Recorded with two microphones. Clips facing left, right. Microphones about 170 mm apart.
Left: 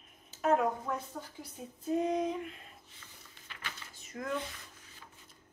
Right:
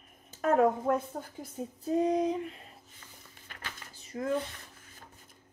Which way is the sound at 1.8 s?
35° right (ahead or behind).